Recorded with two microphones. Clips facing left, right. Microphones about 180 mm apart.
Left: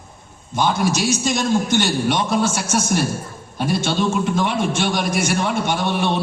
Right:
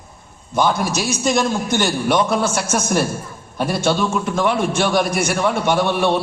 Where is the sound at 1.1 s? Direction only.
55° right (ahead or behind).